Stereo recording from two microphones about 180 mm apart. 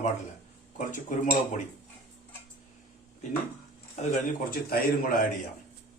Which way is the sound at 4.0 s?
50° left (ahead or behind).